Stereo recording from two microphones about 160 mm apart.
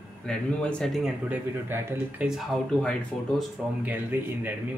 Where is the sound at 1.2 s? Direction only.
10° right (ahead or behind).